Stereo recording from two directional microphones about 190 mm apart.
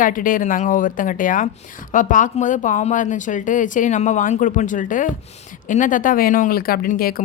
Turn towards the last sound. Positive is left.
turn(degrees=50)  # may be behind; listen again after turning